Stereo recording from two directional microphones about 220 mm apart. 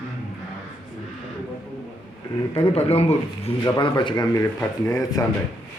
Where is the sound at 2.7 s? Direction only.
25° left (ahead or behind).